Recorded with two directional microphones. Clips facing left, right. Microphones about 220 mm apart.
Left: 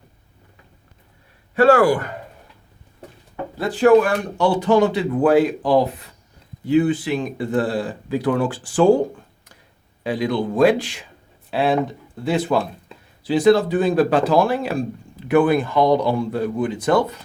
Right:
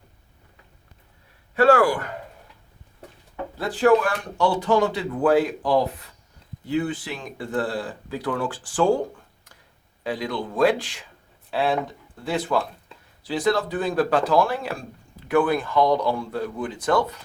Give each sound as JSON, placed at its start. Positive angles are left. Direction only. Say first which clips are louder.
{"t": 1.5, "sound": "a man's voice", "louder": "left 3 dB", "side_deg": 15}
{"t": 3.6, "sound": "speech", "louder": "left 5 dB", "side_deg": 20}
{"t": 10.0, "sound": "speech", "louder": "left 6 dB", "side_deg": 20}